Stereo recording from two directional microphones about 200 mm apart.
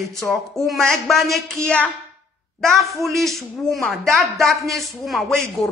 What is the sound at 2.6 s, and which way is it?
A woman's voice, centre (ahead or behind).